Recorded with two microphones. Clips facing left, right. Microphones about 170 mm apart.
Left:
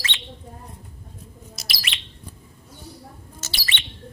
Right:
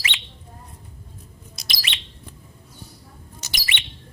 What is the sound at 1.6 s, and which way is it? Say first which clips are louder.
Bird: right 1 dB; centre (ahead or behind).